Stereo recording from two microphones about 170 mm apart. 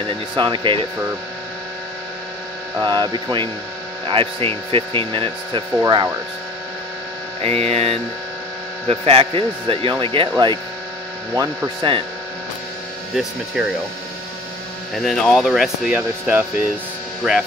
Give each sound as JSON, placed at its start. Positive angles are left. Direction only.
{"t": 0.4, "sound": "speech", "side_deg": -30}
{"t": 2.8, "sound": "speech", "side_deg": -25}
{"t": 7.4, "sound": "speech", "side_deg": -40}
{"t": 13.1, "sound": "speech", "side_deg": -5}
{"t": 15.0, "sound": "speech", "side_deg": 5}